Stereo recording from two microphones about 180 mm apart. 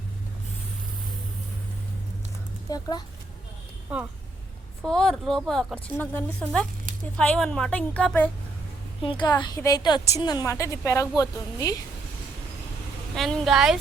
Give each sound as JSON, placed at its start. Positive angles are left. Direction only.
{"t": 2.6, "sound": "a woman's voice", "side_deg": 20}
{"t": 4.8, "sound": "a woman's voice", "side_deg": 5}
{"t": 9.0, "sound": "a woman's voice", "side_deg": 25}
{"t": 13.1, "sound": "a woman's voice", "side_deg": 0}